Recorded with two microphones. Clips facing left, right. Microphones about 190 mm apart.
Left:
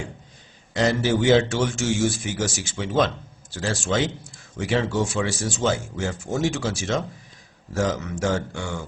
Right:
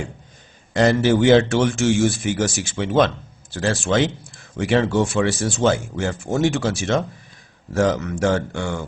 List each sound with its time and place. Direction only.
0.7 s speech: 55° right (ahead or behind)